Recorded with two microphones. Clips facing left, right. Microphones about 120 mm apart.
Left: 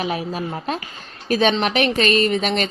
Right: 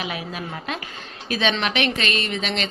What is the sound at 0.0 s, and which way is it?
A woman's voice, 40° left (ahead or behind).